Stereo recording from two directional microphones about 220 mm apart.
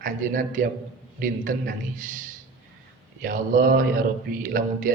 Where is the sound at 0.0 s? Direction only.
35° right (ahead or behind).